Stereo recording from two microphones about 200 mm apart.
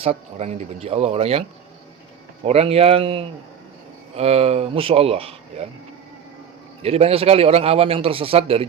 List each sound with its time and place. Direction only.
0.0 s a man's voice: 30° right (ahead or behind)
6.8 s a man's voice: 30° right (ahead or behind)